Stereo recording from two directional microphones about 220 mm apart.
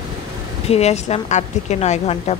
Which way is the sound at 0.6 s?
30° left (ahead or behind).